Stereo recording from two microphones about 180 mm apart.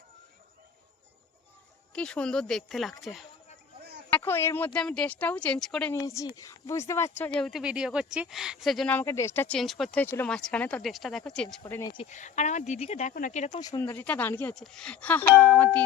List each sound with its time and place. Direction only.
1.9 s speech: 5° left (ahead or behind)
4.1 s speech: 10° left (ahead or behind)
5.9 s speech: 15° left (ahead or behind)
12.0 s speech: 40° left (ahead or behind)
13.6 s speech: 20° left (ahead or behind)